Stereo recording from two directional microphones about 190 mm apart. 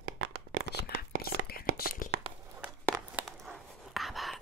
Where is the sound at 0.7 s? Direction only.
55° left (ahead or behind).